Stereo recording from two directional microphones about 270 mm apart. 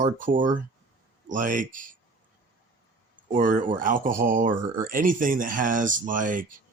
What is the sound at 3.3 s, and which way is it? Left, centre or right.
Speech, right.